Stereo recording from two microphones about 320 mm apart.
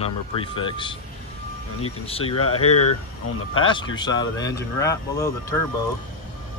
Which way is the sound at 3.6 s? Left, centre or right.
Centre.